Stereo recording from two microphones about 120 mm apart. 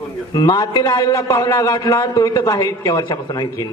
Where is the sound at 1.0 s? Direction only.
25° left (ahead or behind).